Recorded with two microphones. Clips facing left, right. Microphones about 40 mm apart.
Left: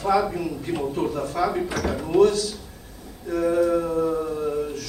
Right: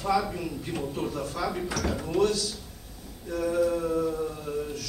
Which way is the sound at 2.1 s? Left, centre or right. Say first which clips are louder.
Left 8 dB; left.